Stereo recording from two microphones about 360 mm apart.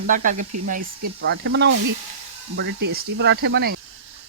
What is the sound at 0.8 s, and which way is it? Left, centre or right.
Speech, right.